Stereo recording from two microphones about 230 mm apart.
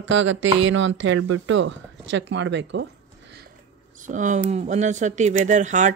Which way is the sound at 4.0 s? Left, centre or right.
Right.